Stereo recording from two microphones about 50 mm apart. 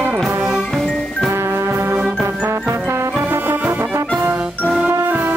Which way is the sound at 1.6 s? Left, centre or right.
Right.